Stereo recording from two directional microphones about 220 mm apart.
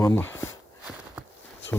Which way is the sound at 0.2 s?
10° left (ahead or behind).